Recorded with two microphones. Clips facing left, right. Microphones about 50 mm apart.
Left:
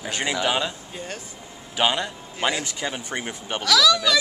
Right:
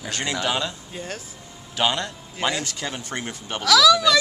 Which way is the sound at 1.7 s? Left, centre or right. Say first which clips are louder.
Left 1 dB; centre.